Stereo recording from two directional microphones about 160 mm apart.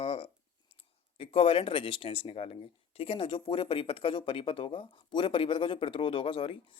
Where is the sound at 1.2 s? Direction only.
35° left (ahead or behind).